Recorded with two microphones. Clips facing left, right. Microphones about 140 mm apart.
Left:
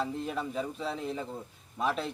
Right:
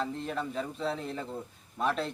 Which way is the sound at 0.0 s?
5° left (ahead or behind).